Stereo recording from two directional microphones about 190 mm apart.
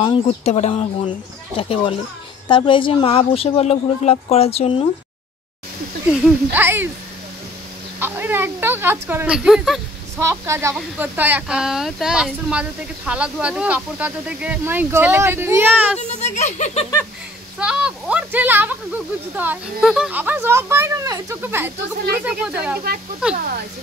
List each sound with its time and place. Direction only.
0.0 s speech: 30° left (ahead or behind)
6.2 s speech: 10° right (ahead or behind)
8.0 s speech: 10° right (ahead or behind)
10.2 s speech: 15° right (ahead or behind)
16.0 s speech: 35° left (ahead or behind)
17.6 s speech: 5° right (ahead or behind)